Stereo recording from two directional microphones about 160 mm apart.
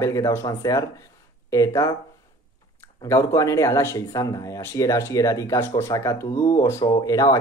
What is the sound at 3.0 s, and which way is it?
Speech, 20° left (ahead or behind).